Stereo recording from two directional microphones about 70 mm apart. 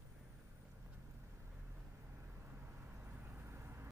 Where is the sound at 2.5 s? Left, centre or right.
Right.